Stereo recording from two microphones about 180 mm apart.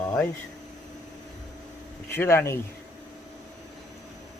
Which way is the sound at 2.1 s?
10° left (ahead or behind).